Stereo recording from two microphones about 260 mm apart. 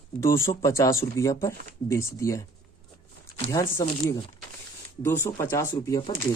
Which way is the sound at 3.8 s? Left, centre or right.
Centre.